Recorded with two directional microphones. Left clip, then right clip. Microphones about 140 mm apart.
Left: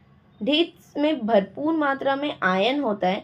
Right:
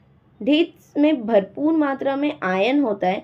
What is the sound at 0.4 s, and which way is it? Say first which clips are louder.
A woman's voice: right 3 dB; 20° right (ahead or behind).